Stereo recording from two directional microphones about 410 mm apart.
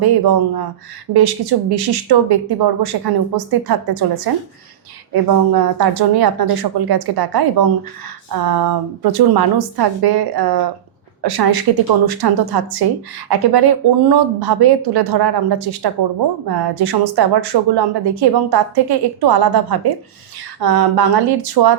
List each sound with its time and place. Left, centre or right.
0.0 s a woman's voice: right